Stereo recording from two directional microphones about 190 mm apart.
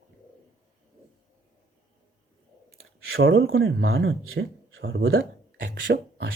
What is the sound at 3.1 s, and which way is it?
Speech, 90° right.